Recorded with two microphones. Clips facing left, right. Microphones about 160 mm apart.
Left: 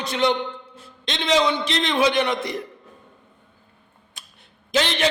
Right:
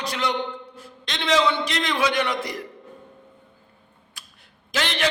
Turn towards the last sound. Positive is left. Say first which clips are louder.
# left 5 dB
turn(degrees=20)  # may be behind; listen again after turning